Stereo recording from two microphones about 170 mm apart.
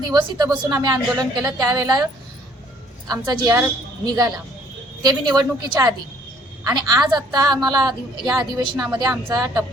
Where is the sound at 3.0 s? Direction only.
20° right (ahead or behind).